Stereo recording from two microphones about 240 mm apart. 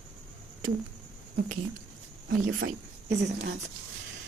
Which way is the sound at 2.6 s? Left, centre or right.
Right.